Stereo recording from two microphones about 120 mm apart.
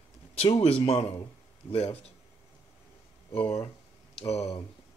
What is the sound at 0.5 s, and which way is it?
Speech, 55° left (ahead or behind).